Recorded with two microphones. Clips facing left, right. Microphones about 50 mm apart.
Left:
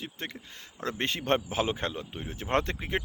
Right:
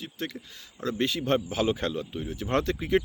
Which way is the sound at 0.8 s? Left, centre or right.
Left.